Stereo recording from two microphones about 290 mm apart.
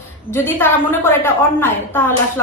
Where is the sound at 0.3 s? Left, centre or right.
Centre.